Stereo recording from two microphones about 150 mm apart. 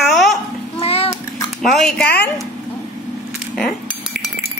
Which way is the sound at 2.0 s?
90° left.